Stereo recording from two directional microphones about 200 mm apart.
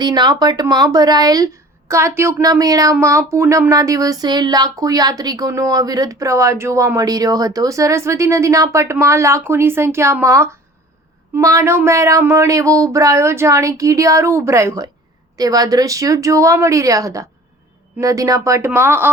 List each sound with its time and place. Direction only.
0.0 s speech: 20° right (ahead or behind)